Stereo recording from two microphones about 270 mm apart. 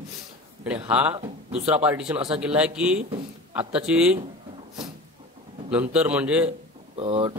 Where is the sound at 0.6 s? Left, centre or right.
Centre.